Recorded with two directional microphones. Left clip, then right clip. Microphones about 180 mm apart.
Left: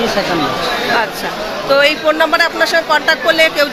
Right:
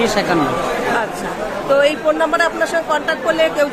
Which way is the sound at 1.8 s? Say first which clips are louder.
Left 3 dB; 5° left (ahead or behind).